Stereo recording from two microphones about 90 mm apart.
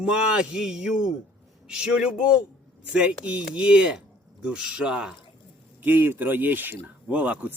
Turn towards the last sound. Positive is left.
turn(degrees=-15)  # may be behind; listen again after turning